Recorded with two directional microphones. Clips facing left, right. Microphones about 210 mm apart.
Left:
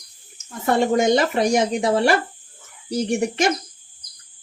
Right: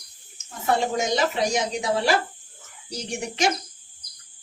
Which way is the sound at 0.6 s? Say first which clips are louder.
Left 6 dB; 55° left (ahead or behind).